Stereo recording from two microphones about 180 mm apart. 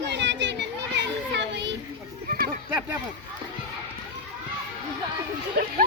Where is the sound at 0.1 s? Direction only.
75° right (ahead or behind).